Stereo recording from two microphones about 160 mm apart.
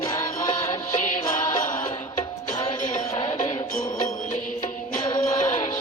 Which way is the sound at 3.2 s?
25° left (ahead or behind).